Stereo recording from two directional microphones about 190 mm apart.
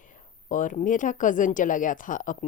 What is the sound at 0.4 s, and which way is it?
Speech, 45° left (ahead or behind).